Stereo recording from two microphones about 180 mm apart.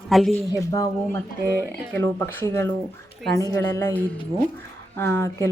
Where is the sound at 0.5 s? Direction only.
20° left (ahead or behind).